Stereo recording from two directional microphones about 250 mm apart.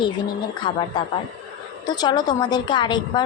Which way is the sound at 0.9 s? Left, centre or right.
Centre.